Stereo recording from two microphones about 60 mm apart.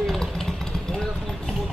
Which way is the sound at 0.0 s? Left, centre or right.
Centre.